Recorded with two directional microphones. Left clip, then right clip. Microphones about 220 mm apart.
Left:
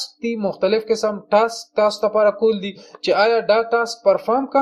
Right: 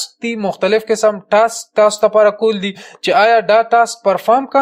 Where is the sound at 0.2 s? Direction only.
45° right (ahead or behind).